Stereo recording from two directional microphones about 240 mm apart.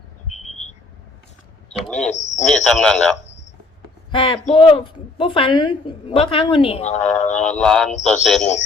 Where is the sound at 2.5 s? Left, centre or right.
Centre.